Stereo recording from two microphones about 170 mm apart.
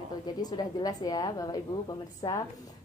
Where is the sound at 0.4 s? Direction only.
25° left (ahead or behind).